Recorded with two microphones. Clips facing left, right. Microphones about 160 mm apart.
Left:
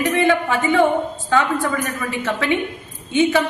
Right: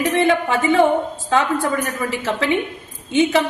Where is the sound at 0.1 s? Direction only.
30° right (ahead or behind).